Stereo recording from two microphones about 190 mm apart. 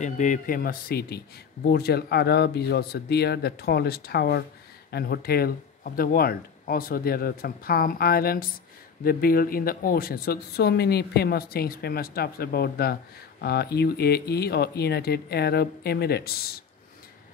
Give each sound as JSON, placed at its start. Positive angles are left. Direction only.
{"t": 0.0, "sound": "speech", "side_deg": 40}